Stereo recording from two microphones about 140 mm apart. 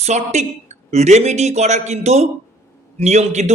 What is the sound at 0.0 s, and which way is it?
A man's voice, 50° right (ahead or behind).